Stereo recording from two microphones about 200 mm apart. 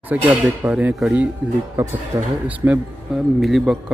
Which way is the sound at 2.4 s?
5° right (ahead or behind).